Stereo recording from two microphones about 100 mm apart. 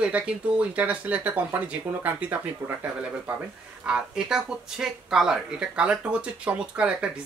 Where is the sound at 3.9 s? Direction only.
10° right (ahead or behind).